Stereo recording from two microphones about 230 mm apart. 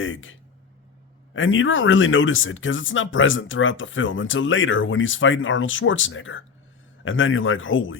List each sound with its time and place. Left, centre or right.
0.0 s speech: left